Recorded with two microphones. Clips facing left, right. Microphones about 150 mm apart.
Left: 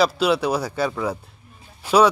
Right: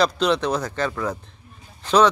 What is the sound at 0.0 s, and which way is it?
Speech, 5° left (ahead or behind).